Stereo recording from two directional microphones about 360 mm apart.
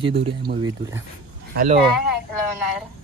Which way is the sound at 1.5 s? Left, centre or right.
Right.